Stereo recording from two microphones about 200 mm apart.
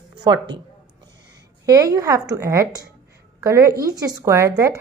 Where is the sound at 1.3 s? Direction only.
15° right (ahead or behind).